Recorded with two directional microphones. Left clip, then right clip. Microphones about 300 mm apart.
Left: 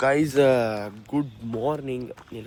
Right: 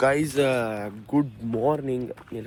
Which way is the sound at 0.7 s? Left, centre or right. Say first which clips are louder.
Right 1 dB; centre.